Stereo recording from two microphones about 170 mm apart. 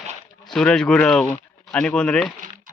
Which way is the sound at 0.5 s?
5° left (ahead or behind).